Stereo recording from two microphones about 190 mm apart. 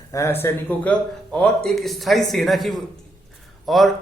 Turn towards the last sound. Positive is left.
turn(degrees=0)  # may be behind; listen again after turning